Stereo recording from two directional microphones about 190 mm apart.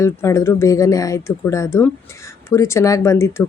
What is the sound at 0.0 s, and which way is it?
Speech, 15° left (ahead or behind).